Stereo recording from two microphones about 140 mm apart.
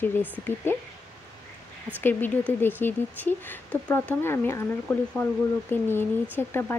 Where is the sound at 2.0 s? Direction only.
15° left (ahead or behind).